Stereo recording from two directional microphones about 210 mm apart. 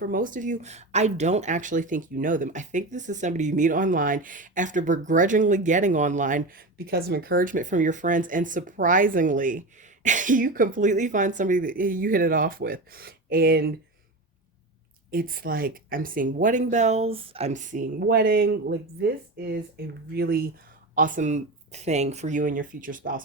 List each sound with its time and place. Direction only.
0.1 s speech: 40° right (ahead or behind)
15.1 s speech: 45° right (ahead or behind)